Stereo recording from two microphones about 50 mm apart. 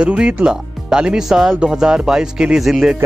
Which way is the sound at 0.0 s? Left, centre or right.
Right.